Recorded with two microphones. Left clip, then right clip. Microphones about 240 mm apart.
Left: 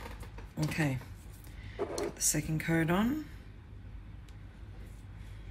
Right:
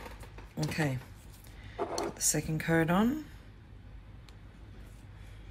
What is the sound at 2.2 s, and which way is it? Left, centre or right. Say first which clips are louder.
Speech: right 2 dB; centre.